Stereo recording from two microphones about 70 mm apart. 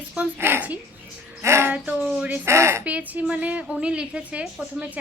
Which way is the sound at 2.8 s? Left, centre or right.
Right.